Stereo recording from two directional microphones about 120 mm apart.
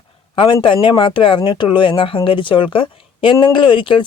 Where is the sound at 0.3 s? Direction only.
45° left (ahead or behind).